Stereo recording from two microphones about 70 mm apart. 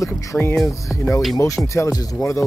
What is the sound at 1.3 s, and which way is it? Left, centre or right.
Speech, left.